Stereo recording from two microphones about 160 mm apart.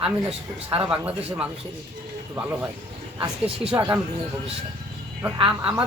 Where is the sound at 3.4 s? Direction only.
35° right (ahead or behind).